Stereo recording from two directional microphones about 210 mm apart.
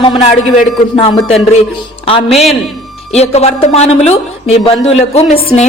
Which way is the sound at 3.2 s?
30° left (ahead or behind).